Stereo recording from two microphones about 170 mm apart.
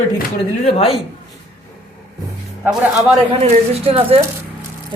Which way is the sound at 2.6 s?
5° right (ahead or behind).